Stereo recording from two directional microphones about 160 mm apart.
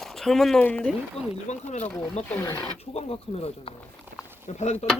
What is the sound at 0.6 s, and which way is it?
Speech, 10° left (ahead or behind).